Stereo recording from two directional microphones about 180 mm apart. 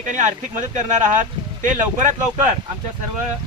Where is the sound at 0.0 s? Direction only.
45° right (ahead or behind).